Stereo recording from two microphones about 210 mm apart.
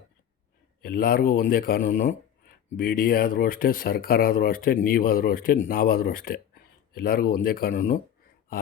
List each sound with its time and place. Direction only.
0.8 s speech: 45° left (ahead or behind)